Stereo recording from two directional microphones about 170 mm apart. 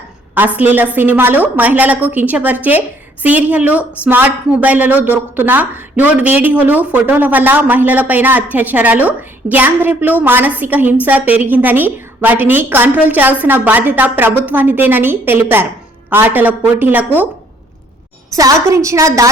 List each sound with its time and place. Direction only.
0.3 s a woman's voice: 10° right (ahead or behind)
18.3 s a woman's voice: 20° right (ahead or behind)